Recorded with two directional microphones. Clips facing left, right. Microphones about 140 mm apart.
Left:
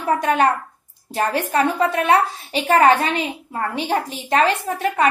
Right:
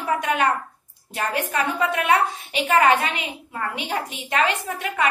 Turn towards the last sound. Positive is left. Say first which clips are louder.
# left 5 dB
turn(degrees=35)  # may be behind; listen again after turning